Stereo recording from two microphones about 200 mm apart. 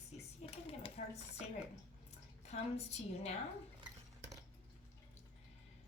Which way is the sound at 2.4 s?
30° left (ahead or behind).